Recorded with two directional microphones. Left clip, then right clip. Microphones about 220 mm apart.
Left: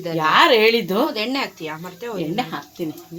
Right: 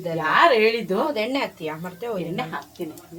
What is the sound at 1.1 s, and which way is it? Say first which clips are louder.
Speech: left 1 dB; centre (ahead or behind).